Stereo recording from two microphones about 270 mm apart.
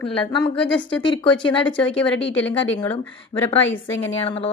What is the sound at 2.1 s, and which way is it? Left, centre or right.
Speech, centre.